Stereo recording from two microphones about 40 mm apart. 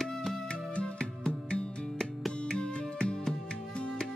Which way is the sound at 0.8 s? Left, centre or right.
Left.